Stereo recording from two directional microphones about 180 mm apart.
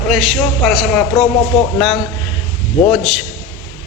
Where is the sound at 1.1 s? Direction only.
15° left (ahead or behind).